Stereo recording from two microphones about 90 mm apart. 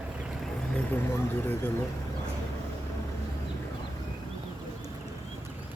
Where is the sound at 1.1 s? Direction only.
25° left (ahead or behind).